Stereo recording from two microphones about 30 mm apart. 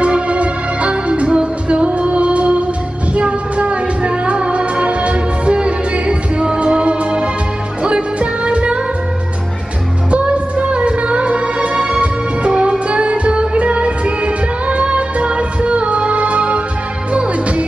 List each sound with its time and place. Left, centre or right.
0.0 s music: right
10.1 s music: right